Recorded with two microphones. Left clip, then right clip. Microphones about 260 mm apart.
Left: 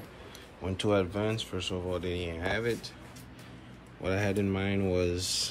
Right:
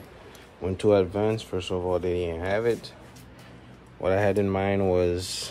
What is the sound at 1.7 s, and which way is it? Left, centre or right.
Speech, right.